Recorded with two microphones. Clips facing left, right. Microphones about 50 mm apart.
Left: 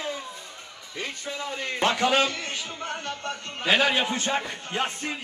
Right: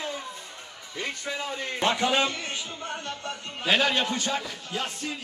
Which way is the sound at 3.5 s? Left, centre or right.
Centre.